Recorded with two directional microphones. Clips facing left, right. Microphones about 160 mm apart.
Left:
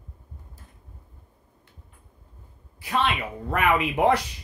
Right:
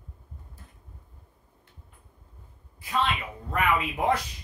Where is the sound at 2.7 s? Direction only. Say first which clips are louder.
Left 2 dB; 80° left.